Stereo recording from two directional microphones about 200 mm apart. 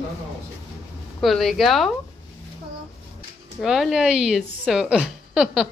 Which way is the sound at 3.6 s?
Centre (ahead or behind).